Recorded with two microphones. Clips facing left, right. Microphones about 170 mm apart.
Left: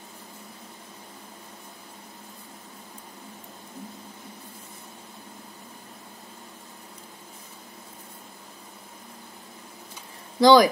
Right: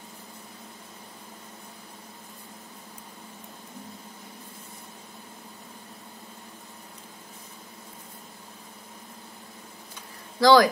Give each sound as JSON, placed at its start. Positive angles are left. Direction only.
{"t": 10.4, "sound": "speech", "side_deg": 20}